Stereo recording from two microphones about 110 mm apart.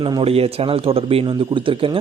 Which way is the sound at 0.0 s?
50° right (ahead or behind).